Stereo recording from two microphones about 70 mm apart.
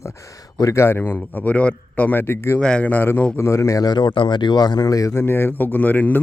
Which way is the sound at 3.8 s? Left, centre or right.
Left.